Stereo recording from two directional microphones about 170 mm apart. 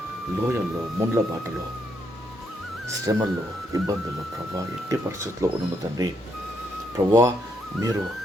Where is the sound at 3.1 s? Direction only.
20° right (ahead or behind).